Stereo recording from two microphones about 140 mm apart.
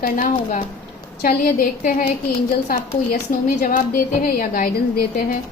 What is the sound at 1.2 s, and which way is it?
A woman's voice, 90° left.